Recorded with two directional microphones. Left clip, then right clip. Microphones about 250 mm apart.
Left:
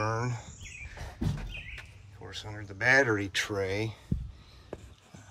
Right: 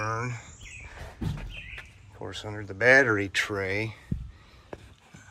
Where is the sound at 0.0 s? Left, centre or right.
Centre.